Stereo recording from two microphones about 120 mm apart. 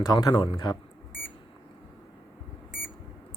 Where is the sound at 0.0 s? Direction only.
35° left (ahead or behind).